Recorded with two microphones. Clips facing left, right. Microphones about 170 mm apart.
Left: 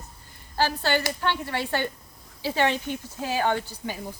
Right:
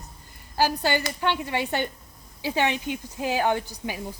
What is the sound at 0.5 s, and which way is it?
Speech, 15° right (ahead or behind).